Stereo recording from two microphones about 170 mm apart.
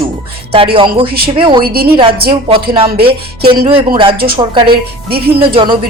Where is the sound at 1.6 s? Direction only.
65° right (ahead or behind).